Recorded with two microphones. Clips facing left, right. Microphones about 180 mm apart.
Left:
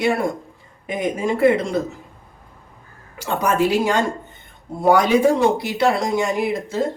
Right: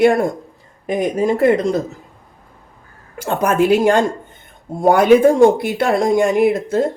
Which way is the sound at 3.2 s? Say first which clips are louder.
Right 3 dB; 50° right (ahead or behind).